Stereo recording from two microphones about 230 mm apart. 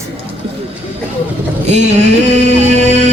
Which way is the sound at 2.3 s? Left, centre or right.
Right.